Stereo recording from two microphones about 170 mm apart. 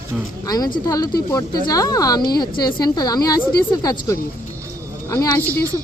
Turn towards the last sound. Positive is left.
turn(degrees=10)  # may be behind; listen again after turning